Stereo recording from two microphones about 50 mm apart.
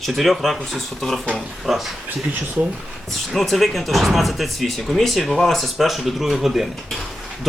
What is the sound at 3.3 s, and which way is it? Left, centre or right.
Speech, centre.